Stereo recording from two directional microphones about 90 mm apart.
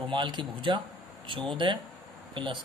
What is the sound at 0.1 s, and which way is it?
Speech, 60° right (ahead or behind).